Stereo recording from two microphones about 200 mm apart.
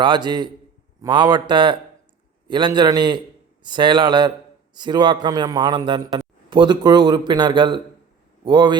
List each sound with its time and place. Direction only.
0.0 s a man's voice: 20° right (ahead or behind)